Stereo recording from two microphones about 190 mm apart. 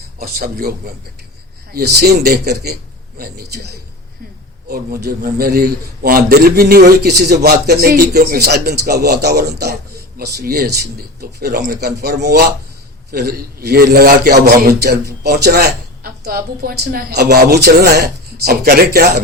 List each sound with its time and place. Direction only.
0.2 s a man's voice: 50° right (ahead or behind)
1.7 s a woman's voice: 60° right (ahead or behind)
4.7 s a man's voice: 55° right (ahead or behind)